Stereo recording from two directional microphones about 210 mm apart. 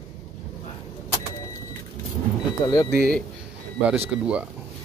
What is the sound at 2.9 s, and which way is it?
Speech, 45° right (ahead or behind).